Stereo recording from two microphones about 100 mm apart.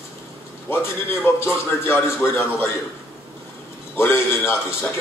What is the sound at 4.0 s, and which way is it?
Speech, 25° left (ahead or behind).